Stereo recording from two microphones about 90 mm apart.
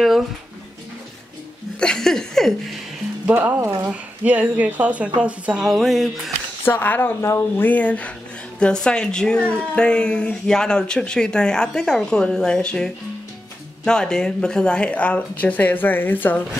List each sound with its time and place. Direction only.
1.8 s a sound: 5° left (ahead or behind)
3.3 s a woman's voice: 25° right (ahead or behind); by 6.3 s centre (ahead or behind)
6.6 s speech: 20° left (ahead or behind)
7.6 s a woman's voice: 15° left (ahead or behind)